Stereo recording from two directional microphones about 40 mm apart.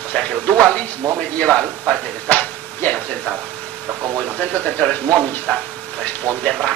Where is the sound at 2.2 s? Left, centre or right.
Left.